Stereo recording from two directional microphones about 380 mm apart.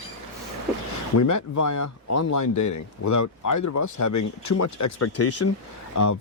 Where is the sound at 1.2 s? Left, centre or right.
Left.